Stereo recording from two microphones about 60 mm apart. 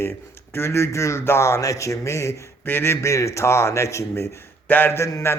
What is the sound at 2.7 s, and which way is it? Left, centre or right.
Speech, left.